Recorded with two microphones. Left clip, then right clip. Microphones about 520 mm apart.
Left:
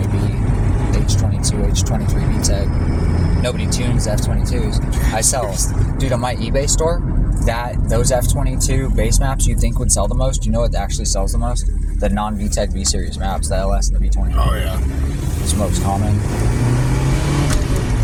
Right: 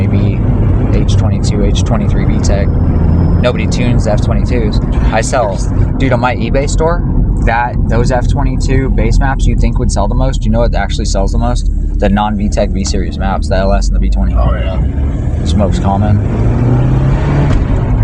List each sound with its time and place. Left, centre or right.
3.4 s speech: left
10.0 s speech: left
12.0 s speech: left